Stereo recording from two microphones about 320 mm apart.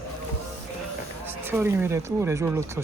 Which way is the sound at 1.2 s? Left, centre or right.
Centre.